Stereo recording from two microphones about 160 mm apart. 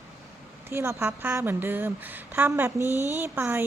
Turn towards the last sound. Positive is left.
turn(degrees=-15)  # may be behind; listen again after turning